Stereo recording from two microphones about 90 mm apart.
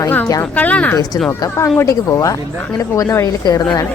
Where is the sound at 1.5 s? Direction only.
35° left (ahead or behind).